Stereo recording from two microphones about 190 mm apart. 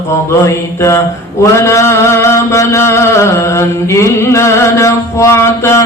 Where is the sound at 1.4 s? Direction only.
15° left (ahead or behind).